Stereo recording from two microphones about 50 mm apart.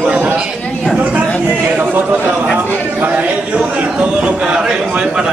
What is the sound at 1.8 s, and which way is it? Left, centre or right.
A man's voice, right.